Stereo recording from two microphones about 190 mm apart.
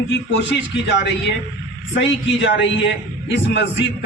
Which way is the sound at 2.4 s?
70° left (ahead or behind).